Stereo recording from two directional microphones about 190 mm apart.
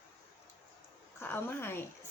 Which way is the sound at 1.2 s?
10° left (ahead or behind).